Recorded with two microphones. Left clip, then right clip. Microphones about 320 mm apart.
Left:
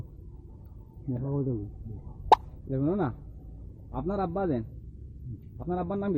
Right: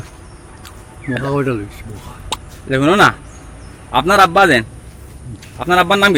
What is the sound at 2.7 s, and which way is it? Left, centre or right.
A man's voice, right.